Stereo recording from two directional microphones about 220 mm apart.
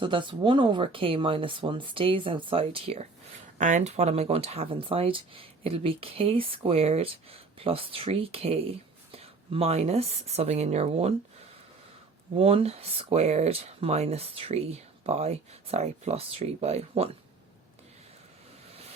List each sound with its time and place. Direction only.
0.0 s speech: 20° right (ahead or behind)
12.4 s speech: 25° right (ahead or behind)